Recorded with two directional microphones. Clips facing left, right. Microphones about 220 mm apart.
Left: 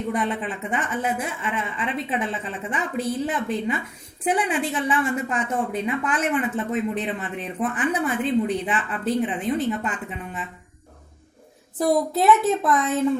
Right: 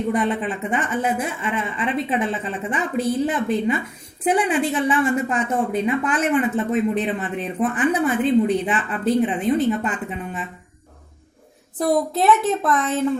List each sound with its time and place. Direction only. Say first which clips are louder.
0.1 s a woman's voice: right 3 dB; 30° right (ahead or behind)
11.8 s a woman's voice: right 1 dB; centre (ahead or behind)